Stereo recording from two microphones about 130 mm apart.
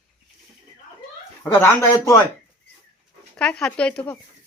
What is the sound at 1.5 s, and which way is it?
Speech, 20° left (ahead or behind).